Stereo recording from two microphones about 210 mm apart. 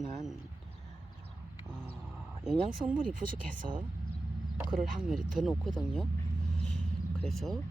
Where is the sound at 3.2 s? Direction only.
40° right (ahead or behind).